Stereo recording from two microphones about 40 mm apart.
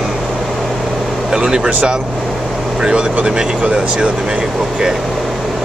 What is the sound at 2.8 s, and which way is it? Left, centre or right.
Speech, right.